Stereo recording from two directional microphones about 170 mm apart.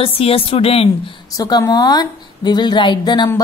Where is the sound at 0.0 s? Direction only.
35° left (ahead or behind).